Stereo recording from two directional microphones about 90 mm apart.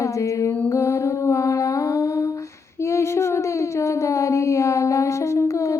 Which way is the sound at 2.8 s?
30° left (ahead or behind).